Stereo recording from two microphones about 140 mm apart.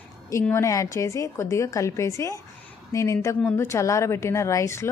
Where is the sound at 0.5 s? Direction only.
20° left (ahead or behind).